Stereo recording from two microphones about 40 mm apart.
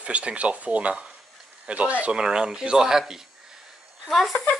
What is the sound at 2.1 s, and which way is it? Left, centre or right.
Speech, right.